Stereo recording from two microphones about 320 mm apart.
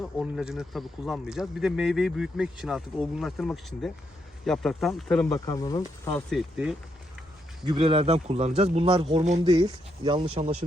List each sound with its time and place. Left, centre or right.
0.0 s speech: centre
7.6 s a man's voice: centre